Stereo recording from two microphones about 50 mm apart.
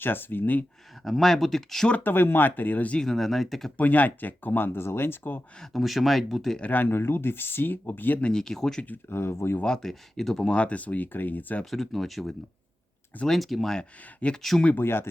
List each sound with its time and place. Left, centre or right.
0.0 s speech: left
1.0 s speech: centre
2.0 s speech: left
3.0 s speech: centre
3.8 s speech: left
5.7 s speech: centre
6.7 s speech: left
8.2 s speech: centre
9.0 s speech: left
9.6 s speech: centre
10.5 s speech: left
11.6 s speech: centre
14.8 s speech: left